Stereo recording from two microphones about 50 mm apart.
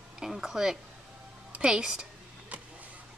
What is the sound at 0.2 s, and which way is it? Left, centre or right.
A woman's voice, centre.